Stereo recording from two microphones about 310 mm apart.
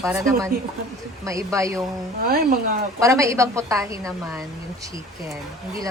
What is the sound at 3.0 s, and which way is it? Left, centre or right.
Speech, centre.